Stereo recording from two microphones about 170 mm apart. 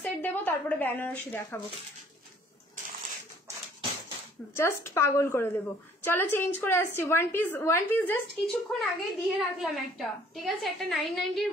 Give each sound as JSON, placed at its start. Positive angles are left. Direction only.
{"t": 0.0, "sound": "a woman's voice", "side_deg": 10}
{"t": 4.6, "sound": "a woman's voice", "side_deg": 15}
{"t": 8.7, "sound": "a woman's voice", "side_deg": 0}